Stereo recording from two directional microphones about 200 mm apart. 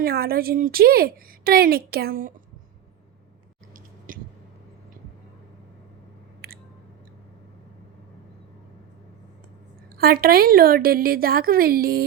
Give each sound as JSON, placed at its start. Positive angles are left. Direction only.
{"t": 0.0, "sound": "a woman's voice", "side_deg": -50}
{"t": 10.0, "sound": "a woman's voice", "side_deg": -50}